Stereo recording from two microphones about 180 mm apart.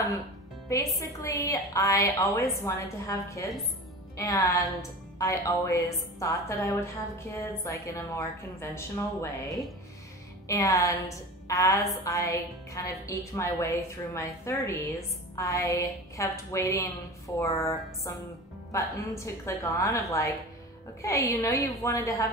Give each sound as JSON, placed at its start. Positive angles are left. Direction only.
{"t": 0.9, "sound": "a woman's voice", "side_deg": 20}